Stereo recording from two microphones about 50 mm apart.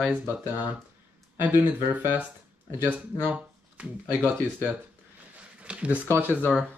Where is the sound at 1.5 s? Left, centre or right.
Right.